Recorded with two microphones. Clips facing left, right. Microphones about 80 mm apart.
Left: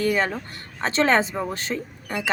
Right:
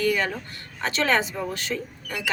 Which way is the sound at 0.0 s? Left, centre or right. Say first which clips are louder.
Left 2 dB; left.